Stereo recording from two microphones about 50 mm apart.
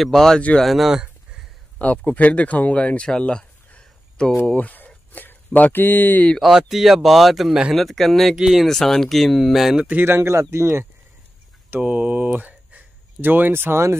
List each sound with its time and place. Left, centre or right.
0.0 s speech: centre
1.8 s speech: left
3.1 s a sound: centre
4.6 s a sound: left
5.8 s speech: left
6.7 s speech: centre
8.6 s speech: centre
10.0 s speech: right
11.8 s speech: right